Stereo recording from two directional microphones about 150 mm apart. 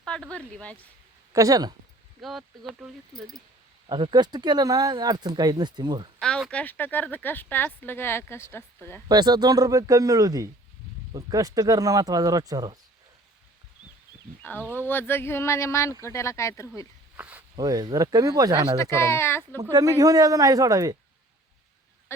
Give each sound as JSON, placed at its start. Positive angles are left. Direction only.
{"t": 0.0, "sound": "speech", "side_deg": 5}
{"t": 1.3, "sound": "speech", "side_deg": -20}
{"t": 2.2, "sound": "speech", "side_deg": 0}
{"t": 3.8, "sound": "speech", "side_deg": -30}
{"t": 6.1, "sound": "speech", "side_deg": 5}
{"t": 9.0, "sound": "speech", "side_deg": -25}
{"t": 14.4, "sound": "speech", "side_deg": 15}
{"t": 17.2, "sound": "speech", "side_deg": -10}
{"t": 17.6, "sound": "speech", "side_deg": -25}
{"t": 18.8, "sound": "speech", "side_deg": 20}
{"t": 19.5, "sound": "speech", "side_deg": -20}